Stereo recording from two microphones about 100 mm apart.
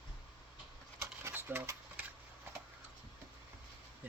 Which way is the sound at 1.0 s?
25° right (ahead or behind).